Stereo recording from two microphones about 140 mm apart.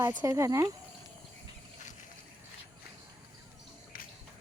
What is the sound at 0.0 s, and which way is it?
Speech, 25° right (ahead or behind).